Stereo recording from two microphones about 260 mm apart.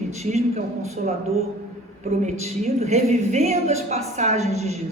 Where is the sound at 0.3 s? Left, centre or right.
Right.